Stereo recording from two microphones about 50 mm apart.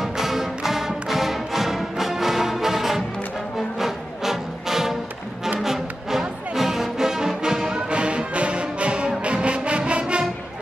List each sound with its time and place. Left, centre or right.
0.0 s music: centre; by 10.2 s right